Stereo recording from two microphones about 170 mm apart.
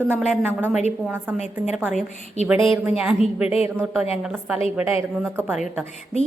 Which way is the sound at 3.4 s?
35° left (ahead or behind).